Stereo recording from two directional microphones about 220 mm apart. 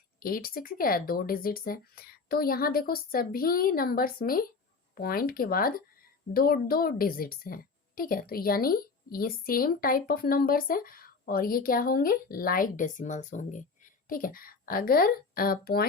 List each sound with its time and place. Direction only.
0.2 s a woman's voice: 40° left (ahead or behind)